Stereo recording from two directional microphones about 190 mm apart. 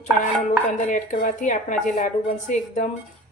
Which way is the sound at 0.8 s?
40° left (ahead or behind).